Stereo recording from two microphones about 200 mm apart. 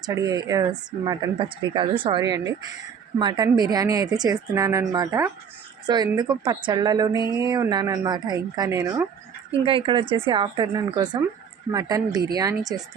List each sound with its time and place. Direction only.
0.0 s speech: 20° right (ahead or behind)